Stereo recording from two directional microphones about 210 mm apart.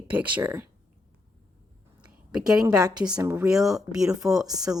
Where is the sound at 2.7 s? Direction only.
15° right (ahead or behind).